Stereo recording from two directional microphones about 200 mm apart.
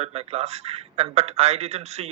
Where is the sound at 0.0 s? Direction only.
30° right (ahead or behind).